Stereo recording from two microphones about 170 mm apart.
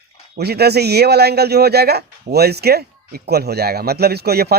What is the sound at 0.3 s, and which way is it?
Speech, 70° right (ahead or behind).